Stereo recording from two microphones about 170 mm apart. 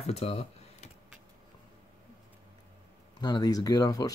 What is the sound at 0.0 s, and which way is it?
Computer keyboard, 40° left (ahead or behind).